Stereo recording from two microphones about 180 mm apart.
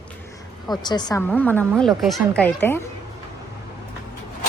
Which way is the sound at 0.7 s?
25° left (ahead or behind).